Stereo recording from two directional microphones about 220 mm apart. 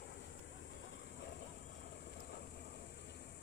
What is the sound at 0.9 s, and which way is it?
Vehicle, 50° left (ahead or behind).